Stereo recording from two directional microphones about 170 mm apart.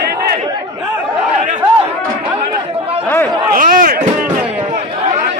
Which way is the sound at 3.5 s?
55° right (ahead or behind).